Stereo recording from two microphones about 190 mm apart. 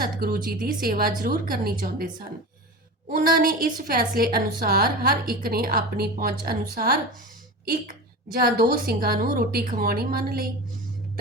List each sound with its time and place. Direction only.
0.0 s a woman's voice: 50° right (ahead or behind)
3.1 s a woman's voice: 50° right (ahead or behind)
8.3 s a woman's voice: 50° right (ahead or behind)